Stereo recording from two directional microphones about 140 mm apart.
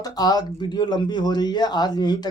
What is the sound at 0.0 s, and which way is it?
Speech, 25° left (ahead or behind).